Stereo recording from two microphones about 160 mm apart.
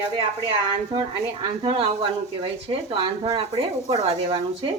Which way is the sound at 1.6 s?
35° right (ahead or behind).